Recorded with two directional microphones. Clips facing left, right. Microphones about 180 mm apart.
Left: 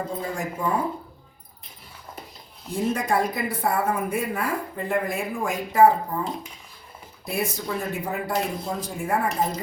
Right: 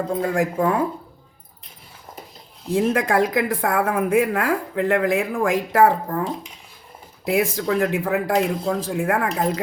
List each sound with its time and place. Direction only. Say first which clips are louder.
0.2 s speech: right 8 dB; 85° right
2.7 s a woman's voice: right 5 dB; 90° right
7.3 s a woman's voice: right 7 dB; 90° right